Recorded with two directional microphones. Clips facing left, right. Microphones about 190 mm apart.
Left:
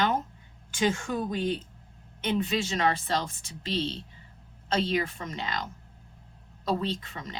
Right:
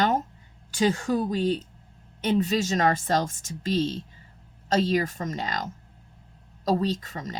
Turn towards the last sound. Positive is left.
turn(degrees=-40)  # may be behind; listen again after turning